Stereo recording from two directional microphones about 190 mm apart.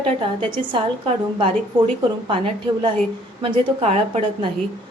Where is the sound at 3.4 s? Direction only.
30° right (ahead or behind).